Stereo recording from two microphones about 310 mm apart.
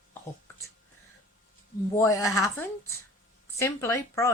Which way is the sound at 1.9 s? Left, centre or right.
Centre.